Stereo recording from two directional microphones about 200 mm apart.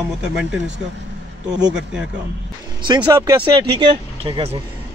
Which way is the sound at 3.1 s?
15° right (ahead or behind).